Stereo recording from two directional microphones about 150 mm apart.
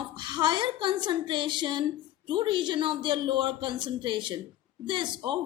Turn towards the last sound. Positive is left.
turn(degrees=-30)  # may be behind; listen again after turning